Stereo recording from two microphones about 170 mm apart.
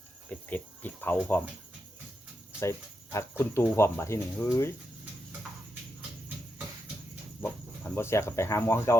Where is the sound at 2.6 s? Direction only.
15° left (ahead or behind).